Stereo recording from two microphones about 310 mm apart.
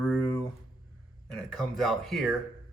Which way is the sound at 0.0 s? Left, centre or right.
Centre.